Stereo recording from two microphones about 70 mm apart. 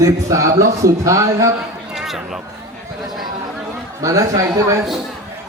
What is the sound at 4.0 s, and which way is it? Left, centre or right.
Speech, right.